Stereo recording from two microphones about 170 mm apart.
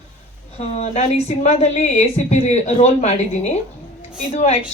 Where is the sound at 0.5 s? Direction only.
40° left (ahead or behind).